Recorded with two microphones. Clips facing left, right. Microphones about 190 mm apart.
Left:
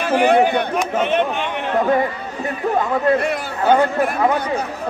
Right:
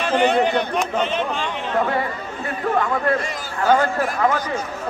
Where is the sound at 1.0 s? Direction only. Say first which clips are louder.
Left 4 dB; 60° left (ahead or behind).